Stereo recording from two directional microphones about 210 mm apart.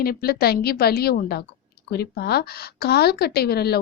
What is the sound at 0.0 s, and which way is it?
Speech, 45° left (ahead or behind).